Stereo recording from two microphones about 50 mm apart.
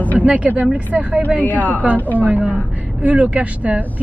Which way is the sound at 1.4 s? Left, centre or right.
Left.